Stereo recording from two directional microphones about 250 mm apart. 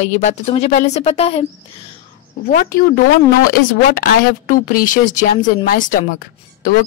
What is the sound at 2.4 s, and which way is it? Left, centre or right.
Speech, left.